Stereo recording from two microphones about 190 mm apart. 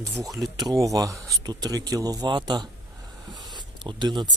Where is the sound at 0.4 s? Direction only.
Centre (ahead or behind).